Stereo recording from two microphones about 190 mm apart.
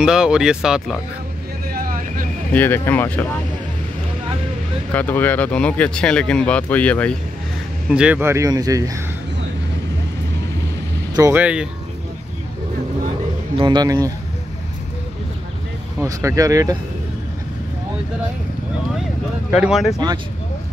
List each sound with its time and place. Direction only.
0.0 s speech: 5° right (ahead or behind)
1.7 s vehicle: 50° right (ahead or behind)
2.5 s speech: 10° left (ahead or behind)
4.9 s speech: 10° left (ahead or behind)
7.9 s speech: 5° right (ahead or behind)
11.1 s speech: 10° right (ahead or behind)
13.6 s a man's voice: 25° right (ahead or behind)
16.0 s speech: 15° right (ahead or behind)
19.5 s speech: 5° right (ahead or behind)